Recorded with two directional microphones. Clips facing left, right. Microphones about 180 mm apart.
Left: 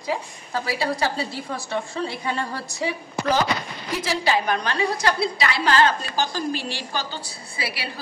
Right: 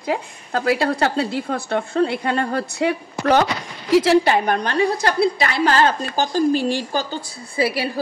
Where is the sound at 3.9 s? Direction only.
90° right.